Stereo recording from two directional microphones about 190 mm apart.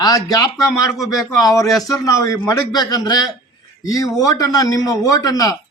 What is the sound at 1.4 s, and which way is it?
A man's voice, 20° left (ahead or behind).